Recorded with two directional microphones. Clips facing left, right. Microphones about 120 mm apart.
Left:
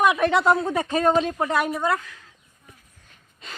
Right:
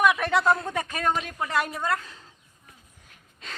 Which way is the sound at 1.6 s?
15° left (ahead or behind).